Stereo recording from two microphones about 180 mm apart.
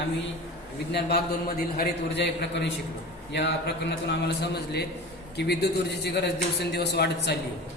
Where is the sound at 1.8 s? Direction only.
70° left (ahead or behind).